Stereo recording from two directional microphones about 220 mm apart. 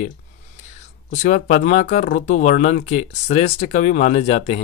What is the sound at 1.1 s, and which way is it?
Speech, 35° left (ahead or behind).